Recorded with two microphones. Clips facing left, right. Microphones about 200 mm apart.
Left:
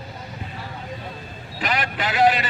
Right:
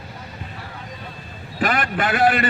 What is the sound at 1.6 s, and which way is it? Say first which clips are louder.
Speech: right 4 dB; 50° right (ahead or behind).